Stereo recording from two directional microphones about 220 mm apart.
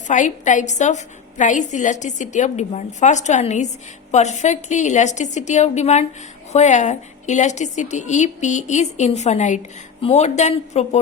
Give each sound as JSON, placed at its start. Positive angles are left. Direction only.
{"t": 0.1, "sound": "a woman's voice", "side_deg": 35}